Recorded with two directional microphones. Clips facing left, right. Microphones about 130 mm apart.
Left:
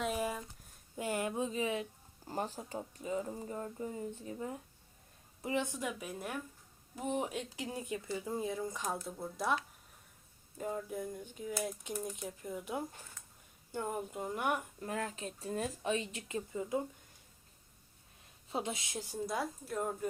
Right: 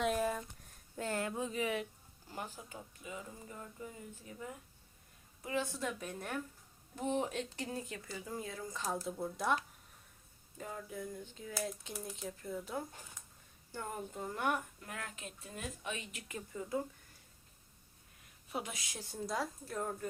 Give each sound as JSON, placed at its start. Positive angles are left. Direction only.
{"t": 0.0, "sound": "a sound", "side_deg": 5}
{"t": 2.2, "sound": "speech", "side_deg": 40}
{"t": 9.0, "sound": "speech", "side_deg": 0}
{"t": 10.6, "sound": "speech", "side_deg": 15}
{"t": 14.8, "sound": "speech", "side_deg": 30}
{"t": 18.4, "sound": "a woman's voice", "side_deg": 25}
{"t": 19.3, "sound": "speech", "side_deg": 5}